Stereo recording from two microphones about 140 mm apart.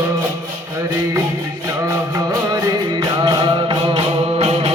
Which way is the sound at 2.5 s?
30° right (ahead or behind).